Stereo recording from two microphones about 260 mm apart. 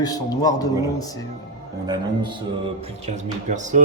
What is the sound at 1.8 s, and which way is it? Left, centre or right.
Speech, centre.